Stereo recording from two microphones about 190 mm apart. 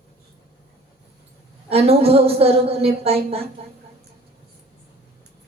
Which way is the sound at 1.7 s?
30° right (ahead or behind).